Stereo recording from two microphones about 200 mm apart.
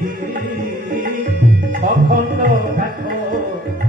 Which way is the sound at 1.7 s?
45° right (ahead or behind).